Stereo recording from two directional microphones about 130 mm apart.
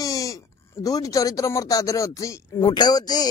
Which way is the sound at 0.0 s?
25° left (ahead or behind).